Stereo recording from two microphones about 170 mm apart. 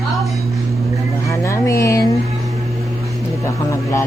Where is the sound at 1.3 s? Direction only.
15° left (ahead or behind).